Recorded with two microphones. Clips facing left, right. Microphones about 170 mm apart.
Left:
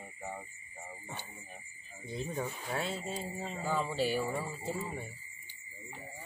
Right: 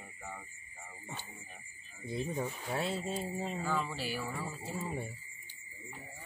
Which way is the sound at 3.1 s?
10° right (ahead or behind).